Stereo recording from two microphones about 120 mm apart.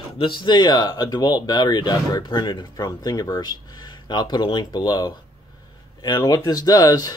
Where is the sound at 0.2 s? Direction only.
45° left (ahead or behind).